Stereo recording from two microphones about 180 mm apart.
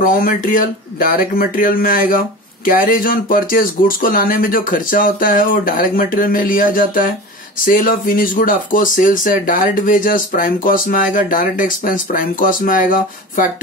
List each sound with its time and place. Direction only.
0.0 s speech: 50° left (ahead or behind)